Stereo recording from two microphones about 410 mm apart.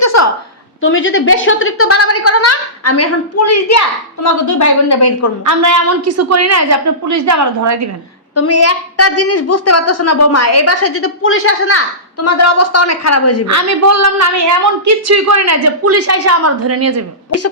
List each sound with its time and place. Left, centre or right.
0.0 s a sound: left
0.8 s a woman's voice: left
5.5 s a woman's voice: right
8.4 s a woman's voice: left
13.5 s a woman's voice: right